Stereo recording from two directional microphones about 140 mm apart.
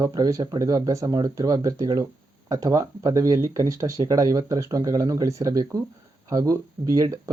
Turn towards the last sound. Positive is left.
turn(degrees=-25)  # may be behind; listen again after turning